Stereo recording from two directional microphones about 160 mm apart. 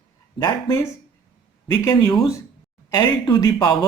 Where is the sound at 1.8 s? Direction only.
25° left (ahead or behind).